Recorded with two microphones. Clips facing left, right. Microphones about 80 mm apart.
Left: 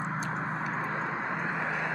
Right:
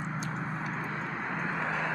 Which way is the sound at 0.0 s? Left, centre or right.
Left.